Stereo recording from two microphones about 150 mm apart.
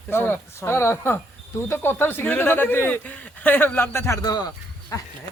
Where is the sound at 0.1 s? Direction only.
15° left (ahead or behind).